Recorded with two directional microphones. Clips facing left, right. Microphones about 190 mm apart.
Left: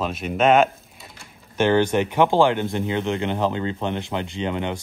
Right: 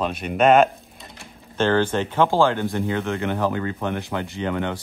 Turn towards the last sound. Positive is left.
turn(degrees=20)  # may be behind; listen again after turning